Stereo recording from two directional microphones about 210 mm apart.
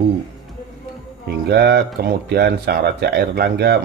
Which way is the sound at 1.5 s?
50° right (ahead or behind).